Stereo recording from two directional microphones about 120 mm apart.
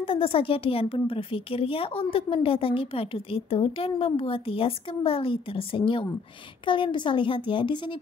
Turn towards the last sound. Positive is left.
turn(degrees=40)  # may be behind; listen again after turning